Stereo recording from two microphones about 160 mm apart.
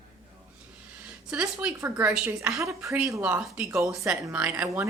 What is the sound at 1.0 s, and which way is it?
Speech, 10° right (ahead or behind).